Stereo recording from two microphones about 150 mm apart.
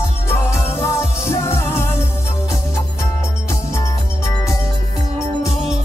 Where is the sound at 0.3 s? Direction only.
20° left (ahead or behind).